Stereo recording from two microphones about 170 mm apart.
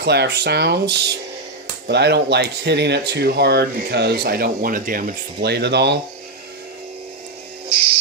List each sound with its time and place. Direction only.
0.0 s speech: 75° right (ahead or behind)